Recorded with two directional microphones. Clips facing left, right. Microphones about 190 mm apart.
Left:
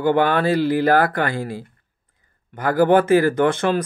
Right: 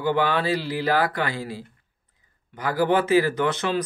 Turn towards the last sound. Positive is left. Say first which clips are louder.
# left 5 dB
turn(degrees=50)  # may be behind; listen again after turning